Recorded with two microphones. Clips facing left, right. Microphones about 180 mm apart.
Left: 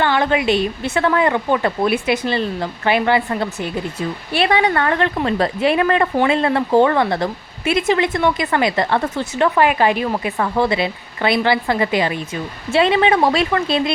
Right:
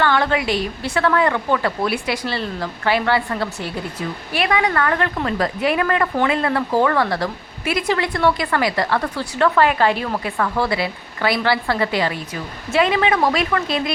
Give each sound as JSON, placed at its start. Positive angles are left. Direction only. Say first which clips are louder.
{"t": 0.0, "sound": "a woman's voice", "louder": "left 2 dB", "side_deg": 20}
{"t": 12.7, "sound": "a woman's voice", "louder": "left 3 dB", "side_deg": 30}